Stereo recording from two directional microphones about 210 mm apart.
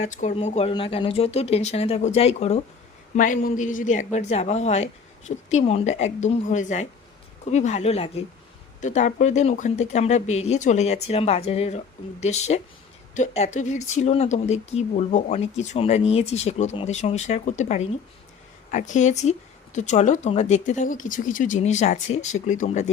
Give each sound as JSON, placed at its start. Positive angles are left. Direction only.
{"t": 0.0, "sound": "speech", "side_deg": 35}